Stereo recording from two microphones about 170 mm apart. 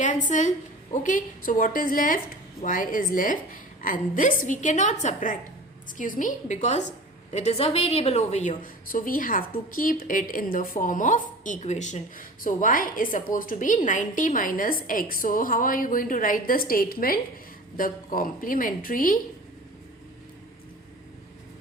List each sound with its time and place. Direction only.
0.0 s a woman's voice: 45° left (ahead or behind)